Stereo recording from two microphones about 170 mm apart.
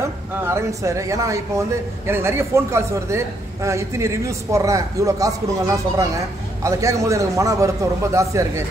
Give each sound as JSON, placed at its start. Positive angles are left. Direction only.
{"t": 0.0, "sound": "a man's voice", "side_deg": -15}